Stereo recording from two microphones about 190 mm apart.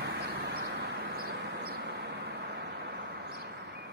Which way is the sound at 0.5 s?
50° right (ahead or behind).